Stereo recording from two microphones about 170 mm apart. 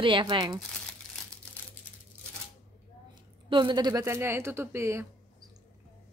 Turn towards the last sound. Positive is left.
turn(degrees=-15)  # may be behind; listen again after turning